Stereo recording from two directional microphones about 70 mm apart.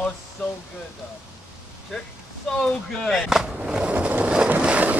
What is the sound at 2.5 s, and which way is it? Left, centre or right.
Speech, centre.